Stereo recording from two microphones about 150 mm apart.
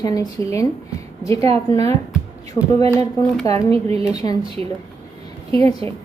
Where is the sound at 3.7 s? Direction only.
40° right (ahead or behind).